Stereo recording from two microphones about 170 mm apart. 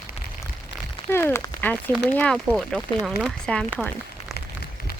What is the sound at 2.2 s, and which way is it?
Speech, 5° left (ahead or behind).